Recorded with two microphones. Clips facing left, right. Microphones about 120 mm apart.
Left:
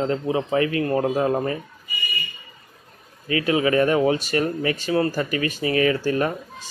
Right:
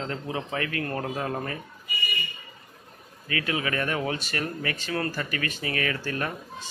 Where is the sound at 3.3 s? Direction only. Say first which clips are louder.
Left 9 dB; 25° left (ahead or behind).